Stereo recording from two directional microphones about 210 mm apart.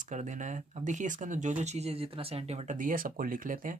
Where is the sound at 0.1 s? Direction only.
35° right (ahead or behind).